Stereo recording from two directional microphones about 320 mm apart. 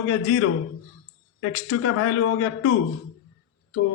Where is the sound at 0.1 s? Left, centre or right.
Left.